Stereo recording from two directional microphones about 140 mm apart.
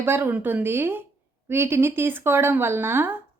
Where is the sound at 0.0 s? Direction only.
15° right (ahead or behind).